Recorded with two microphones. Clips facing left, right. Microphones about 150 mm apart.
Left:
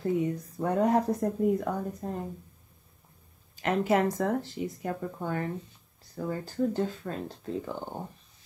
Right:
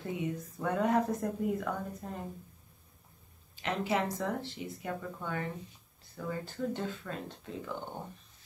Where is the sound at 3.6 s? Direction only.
50° left (ahead or behind).